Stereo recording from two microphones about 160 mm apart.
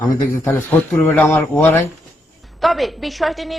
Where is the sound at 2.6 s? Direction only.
Centre (ahead or behind).